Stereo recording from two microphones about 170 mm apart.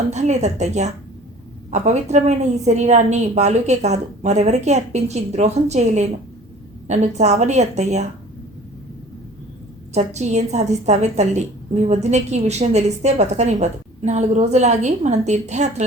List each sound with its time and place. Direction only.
0.1 s a woman's voice: 40° right (ahead or behind)
9.9 s a woman's voice: 40° right (ahead or behind)